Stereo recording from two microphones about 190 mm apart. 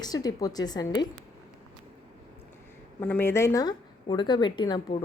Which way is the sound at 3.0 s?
10° left (ahead or behind).